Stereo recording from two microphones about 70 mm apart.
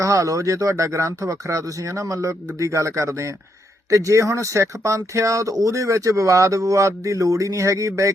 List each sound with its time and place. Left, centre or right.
0.0 s speech: right